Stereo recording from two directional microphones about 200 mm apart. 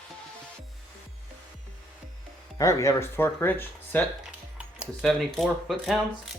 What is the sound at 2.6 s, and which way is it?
Speech, 15° left (ahead or behind).